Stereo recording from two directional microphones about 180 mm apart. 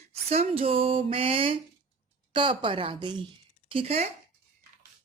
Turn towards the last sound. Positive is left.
turn(degrees=-35)  # may be behind; listen again after turning